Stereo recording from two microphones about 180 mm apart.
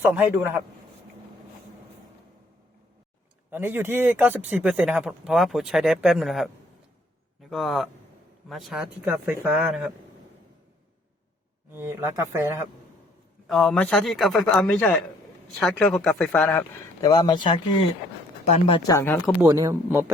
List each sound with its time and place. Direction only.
0.0 s speech: 10° right (ahead or behind)
3.5 s speech: 10° right (ahead or behind)
11.7 s speech: 15° right (ahead or behind)
13.5 s speech: 5° left (ahead or behind)
19.5 s speech: 20° right (ahead or behind)